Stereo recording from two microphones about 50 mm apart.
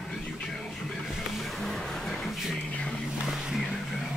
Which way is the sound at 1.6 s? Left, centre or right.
Centre.